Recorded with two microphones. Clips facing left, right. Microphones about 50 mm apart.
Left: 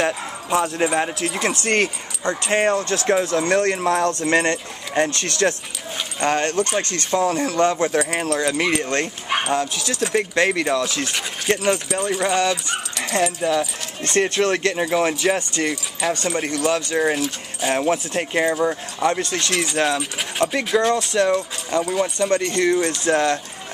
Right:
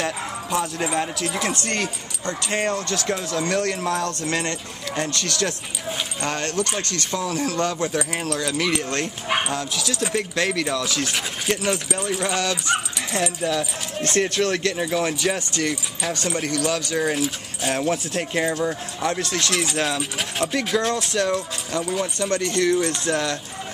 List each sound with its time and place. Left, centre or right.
0.0 s speech: centre
1.6 s speech: left
9.0 s speech: centre
9.5 s speech: left
9.8 s speech: centre
10.1 s speech: left
14.1 s speech: left
17.2 s speech: centre
17.7 s speech: centre